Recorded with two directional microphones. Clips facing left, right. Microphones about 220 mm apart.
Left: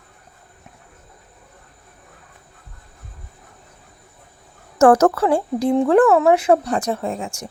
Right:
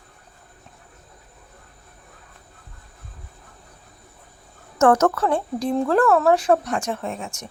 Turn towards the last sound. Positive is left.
turn(degrees=30)  # may be behind; listen again after turning